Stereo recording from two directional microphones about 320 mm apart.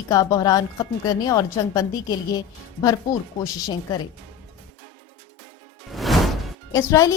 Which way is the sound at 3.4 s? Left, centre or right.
Centre.